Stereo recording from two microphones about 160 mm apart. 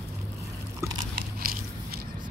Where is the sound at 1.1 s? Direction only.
65° right (ahead or behind).